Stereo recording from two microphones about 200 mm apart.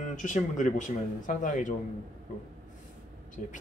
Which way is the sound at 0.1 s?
40° left (ahead or behind).